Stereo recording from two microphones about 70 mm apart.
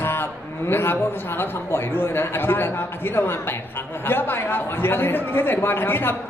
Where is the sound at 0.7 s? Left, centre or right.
Left.